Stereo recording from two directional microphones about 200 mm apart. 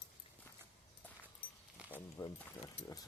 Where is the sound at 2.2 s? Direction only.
20° left (ahead or behind).